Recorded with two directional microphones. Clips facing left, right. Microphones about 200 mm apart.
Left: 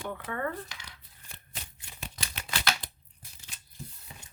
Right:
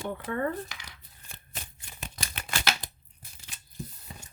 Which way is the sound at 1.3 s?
50° right (ahead or behind).